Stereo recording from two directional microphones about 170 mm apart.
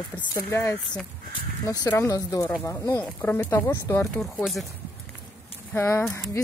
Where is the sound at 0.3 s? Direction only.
15° left (ahead or behind).